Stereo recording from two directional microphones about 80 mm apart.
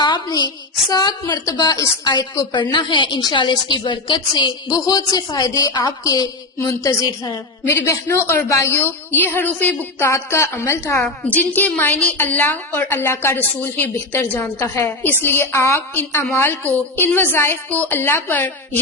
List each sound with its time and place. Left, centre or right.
0.0 s a woman's voice: left
2.5 s a woman's voice: left
3.3 s a woman's voice: left
4.7 s a woman's voice: left
7.8 s a woman's voice: left
10.0 s a woman's voice: left
11.3 s a woman's voice: left